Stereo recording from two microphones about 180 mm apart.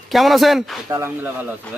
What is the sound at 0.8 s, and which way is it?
Speech, 15° right (ahead or behind).